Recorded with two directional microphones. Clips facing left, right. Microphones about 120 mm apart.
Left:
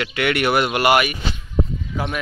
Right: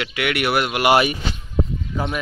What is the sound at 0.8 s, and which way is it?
Speech, 25° right (ahead or behind).